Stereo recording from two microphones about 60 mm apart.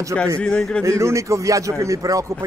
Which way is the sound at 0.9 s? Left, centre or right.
Right.